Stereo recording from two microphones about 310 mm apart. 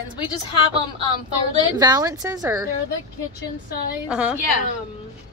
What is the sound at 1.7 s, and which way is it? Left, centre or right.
A woman's voice, centre.